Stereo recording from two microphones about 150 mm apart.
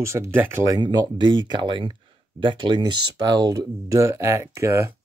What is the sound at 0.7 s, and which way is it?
Speech, 30° right (ahead or behind).